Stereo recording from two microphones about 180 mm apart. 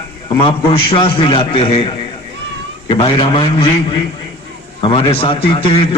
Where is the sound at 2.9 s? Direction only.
30° left (ahead or behind).